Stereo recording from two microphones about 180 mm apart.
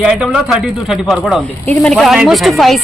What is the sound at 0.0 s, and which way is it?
Speech, 5° right (ahead or behind).